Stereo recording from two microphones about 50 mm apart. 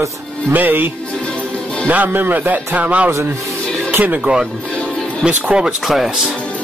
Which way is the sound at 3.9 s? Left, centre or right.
Right.